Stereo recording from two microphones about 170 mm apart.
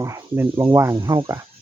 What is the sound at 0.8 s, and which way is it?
Speech, 15° right (ahead or behind).